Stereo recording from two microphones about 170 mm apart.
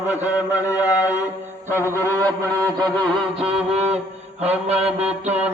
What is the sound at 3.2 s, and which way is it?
Mantra, centre (ahead or behind).